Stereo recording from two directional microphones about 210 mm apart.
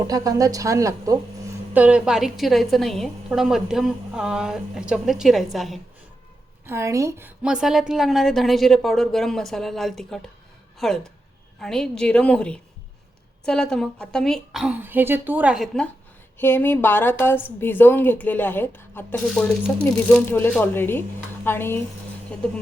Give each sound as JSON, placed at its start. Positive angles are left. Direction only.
{"t": 0.0, "sound": "a woman's voice", "side_deg": -15}
{"t": 6.7, "sound": "a woman's voice", "side_deg": -15}